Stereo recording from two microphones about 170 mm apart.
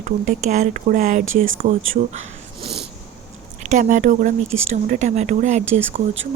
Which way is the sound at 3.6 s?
45° right (ahead or behind).